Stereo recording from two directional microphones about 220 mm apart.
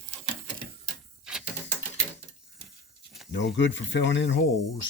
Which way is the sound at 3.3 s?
55° left (ahead or behind).